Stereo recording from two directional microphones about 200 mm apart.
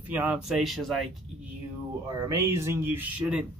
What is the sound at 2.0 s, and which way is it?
Speech, 15° right (ahead or behind).